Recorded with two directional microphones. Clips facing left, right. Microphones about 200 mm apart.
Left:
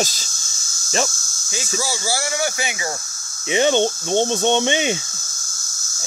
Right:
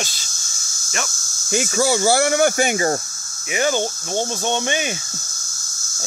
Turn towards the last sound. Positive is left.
turn(degrees=20)  # may be behind; listen again after turning